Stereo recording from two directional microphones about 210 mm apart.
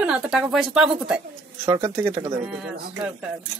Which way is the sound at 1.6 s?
15° right (ahead or behind).